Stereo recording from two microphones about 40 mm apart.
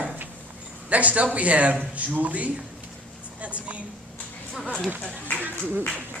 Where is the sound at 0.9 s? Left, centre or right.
Right.